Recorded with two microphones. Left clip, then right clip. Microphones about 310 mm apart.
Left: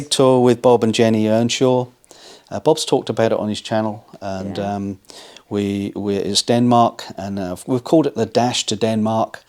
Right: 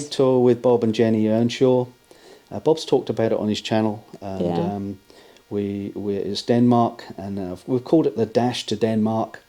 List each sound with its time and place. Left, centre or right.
0.1 s speech: left
3.5 s speech: centre
4.5 s speech: left